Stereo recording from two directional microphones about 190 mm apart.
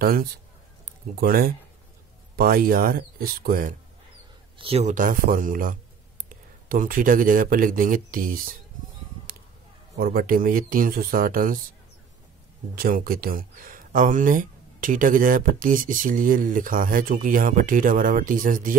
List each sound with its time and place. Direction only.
0.0 s speech: 50° right (ahead or behind)
4.6 s speech: 30° right (ahead or behind); by 8.5 s 45° right (ahead or behind)
9.9 s speech: 50° right (ahead or behind)
12.7 s speech: 50° right (ahead or behind)